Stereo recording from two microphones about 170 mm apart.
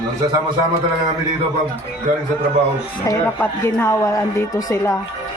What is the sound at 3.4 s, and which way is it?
A woman's voice, 15° left (ahead or behind).